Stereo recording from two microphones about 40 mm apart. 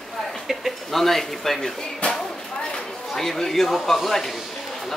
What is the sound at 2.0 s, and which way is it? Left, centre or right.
Speech, left.